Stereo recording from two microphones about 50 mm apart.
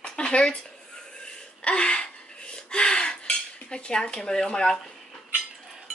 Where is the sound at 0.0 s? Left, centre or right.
Centre.